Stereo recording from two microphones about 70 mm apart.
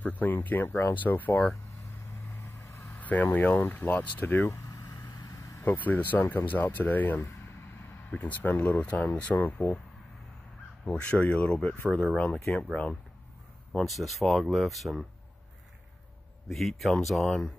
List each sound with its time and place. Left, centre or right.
0.0 s speech: left
3.0 s speech: left
4.5 s vehicle: left
5.6 s speech: left
10.9 s speech: centre
13.7 s speech: centre
16.4 s speech: centre